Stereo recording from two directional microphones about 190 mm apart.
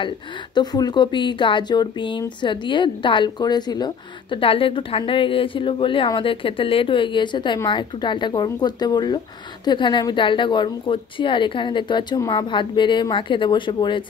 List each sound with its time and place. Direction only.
0.6 s speech: 20° left (ahead or behind)